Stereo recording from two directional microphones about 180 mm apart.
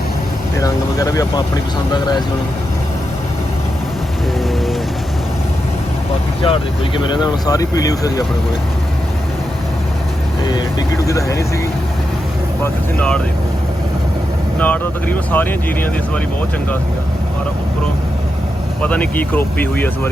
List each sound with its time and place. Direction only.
0.6 s speech: 20° left (ahead or behind)
6.4 s speech: 30° left (ahead or behind)
10.4 s speech: 25° left (ahead or behind)
12.6 s speech: 5° left (ahead or behind)
14.6 s speech: 10° left (ahead or behind)
18.8 s speech: 10° left (ahead or behind)